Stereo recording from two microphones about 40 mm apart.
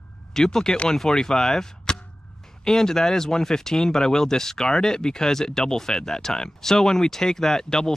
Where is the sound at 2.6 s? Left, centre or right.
Centre.